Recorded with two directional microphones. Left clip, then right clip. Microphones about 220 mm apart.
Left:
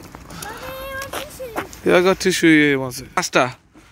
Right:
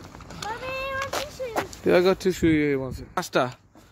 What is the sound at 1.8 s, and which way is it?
Speech, 10° left (ahead or behind).